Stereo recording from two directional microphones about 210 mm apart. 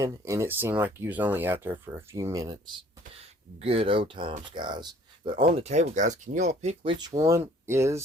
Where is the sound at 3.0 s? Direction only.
30° right (ahead or behind).